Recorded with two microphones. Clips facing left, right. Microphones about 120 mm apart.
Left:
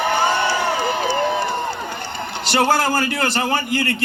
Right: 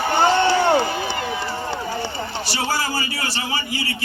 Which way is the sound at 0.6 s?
65° left (ahead or behind).